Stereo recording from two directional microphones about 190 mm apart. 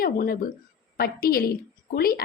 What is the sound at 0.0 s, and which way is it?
A woman's voice, 50° left (ahead or behind).